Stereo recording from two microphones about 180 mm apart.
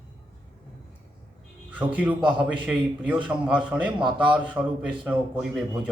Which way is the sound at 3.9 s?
25° right (ahead or behind).